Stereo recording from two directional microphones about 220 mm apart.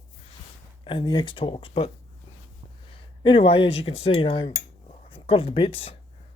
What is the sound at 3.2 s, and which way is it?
Speech, 25° left (ahead or behind).